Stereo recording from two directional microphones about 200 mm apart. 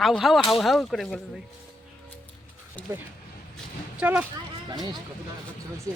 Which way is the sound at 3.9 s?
5° right (ahead or behind).